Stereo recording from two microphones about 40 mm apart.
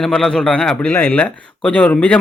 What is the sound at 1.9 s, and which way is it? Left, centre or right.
Speech, left.